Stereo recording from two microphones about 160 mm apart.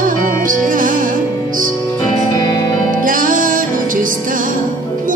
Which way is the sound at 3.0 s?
55° right (ahead or behind).